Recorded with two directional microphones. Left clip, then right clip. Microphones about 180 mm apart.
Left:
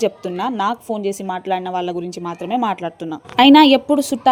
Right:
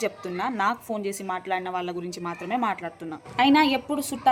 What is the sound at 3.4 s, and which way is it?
Speech, 50° left (ahead or behind).